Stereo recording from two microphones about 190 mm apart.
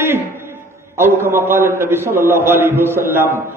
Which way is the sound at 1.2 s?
10° right (ahead or behind).